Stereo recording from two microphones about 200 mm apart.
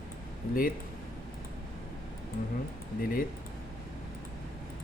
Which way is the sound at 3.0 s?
45° left (ahead or behind).